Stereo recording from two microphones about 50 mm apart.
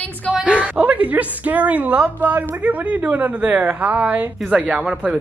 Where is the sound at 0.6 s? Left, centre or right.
Right.